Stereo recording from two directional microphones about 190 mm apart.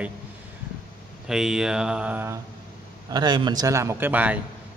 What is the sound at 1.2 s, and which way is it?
A man's voice, centre (ahead or behind).